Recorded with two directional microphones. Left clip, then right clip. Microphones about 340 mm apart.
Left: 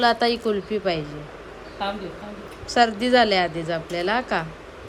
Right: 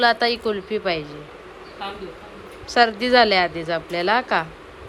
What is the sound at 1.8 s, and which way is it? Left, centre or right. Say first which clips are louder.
Speech: left 4 dB; left.